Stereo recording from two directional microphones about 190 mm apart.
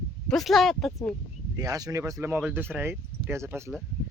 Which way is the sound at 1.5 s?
20° right (ahead or behind).